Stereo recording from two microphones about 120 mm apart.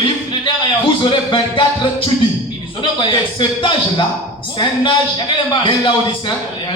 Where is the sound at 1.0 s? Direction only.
40° left (ahead or behind).